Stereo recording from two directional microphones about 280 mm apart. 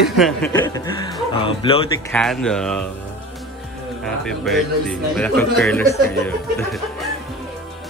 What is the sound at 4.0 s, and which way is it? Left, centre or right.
Speech, centre.